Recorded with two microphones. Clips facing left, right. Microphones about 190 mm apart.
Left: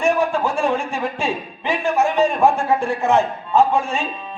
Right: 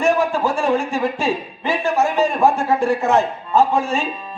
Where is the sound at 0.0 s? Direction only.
40° right (ahead or behind).